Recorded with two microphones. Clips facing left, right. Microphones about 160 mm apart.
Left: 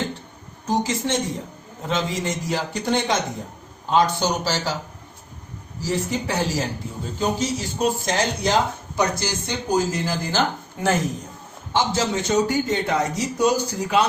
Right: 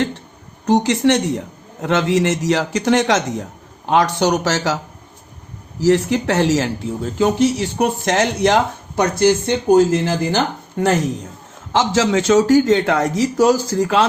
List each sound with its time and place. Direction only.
0.6 s a man's voice: 70° right (ahead or behind); by 3.4 s 90° right
3.8 s a man's voice: 80° right
5.8 s speech: 80° right
11.7 s a man's voice: 90° right